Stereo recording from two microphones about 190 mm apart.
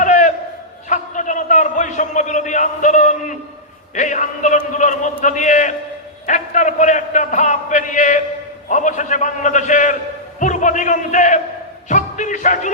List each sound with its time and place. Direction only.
0.0 s a sound: 40° left (ahead or behind)
3.9 s a man's voice: 40° left (ahead or behind)
11.9 s music: 40° left (ahead or behind)